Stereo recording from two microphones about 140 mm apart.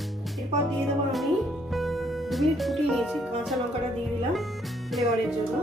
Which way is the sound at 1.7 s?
Centre (ahead or behind).